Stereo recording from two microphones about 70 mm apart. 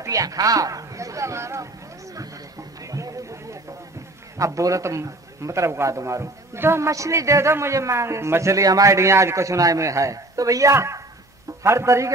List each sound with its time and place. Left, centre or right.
0.0 s speech: right
2.1 s chatter: right
4.4 s a man's voice: right
6.9 s a man's voice: right